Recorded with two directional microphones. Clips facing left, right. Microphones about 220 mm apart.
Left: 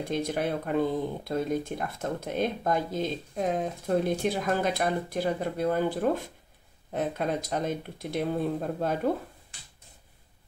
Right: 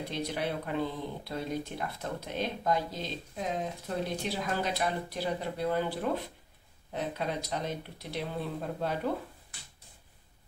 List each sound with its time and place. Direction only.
0.1 s speech: 50° left (ahead or behind)